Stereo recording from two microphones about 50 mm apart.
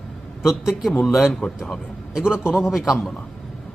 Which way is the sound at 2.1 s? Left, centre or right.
Centre.